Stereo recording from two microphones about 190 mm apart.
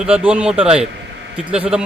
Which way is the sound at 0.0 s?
5° right (ahead or behind).